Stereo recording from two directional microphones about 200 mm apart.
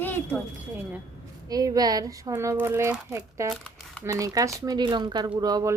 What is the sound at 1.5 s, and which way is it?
Speech, 20° right (ahead or behind).